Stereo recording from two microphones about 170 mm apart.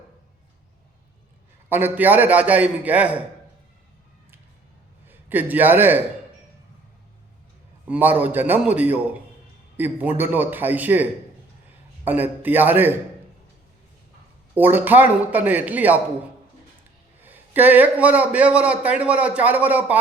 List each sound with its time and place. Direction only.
1.7 s a man's voice: 10° right (ahead or behind)
5.0 s a man's voice: 10° right (ahead or behind)
7.9 s a man's voice: 10° right (ahead or behind)
14.5 s a man's voice: 10° right (ahead or behind)
17.2 s a man's voice: 10° right (ahead or behind)